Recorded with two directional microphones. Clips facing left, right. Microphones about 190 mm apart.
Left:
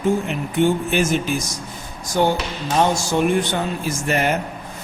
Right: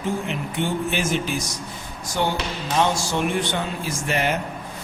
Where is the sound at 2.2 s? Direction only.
40° left (ahead or behind).